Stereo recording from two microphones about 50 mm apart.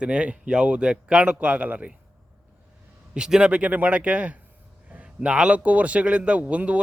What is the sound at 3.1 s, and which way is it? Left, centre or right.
A man's voice, centre.